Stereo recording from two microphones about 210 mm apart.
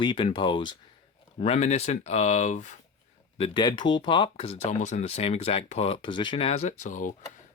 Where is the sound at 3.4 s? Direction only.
25° left (ahead or behind); by 7.1 s 40° left (ahead or behind).